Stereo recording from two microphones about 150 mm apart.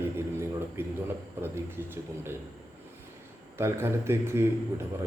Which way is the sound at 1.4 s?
15° right (ahead or behind).